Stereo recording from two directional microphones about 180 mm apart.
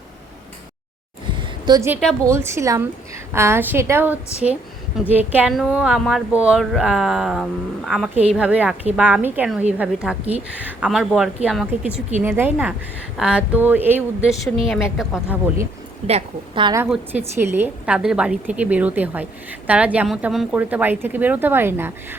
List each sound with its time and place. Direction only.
1.4 s a sound: 20° right (ahead or behind)
2.2 s a woman's voice: 15° right (ahead or behind)
16.0 s a woman's voice: 30° right (ahead or behind)
16.9 s a woman's voice: 10° right (ahead or behind)